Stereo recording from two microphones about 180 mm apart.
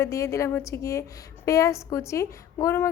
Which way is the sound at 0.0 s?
15° left (ahead or behind).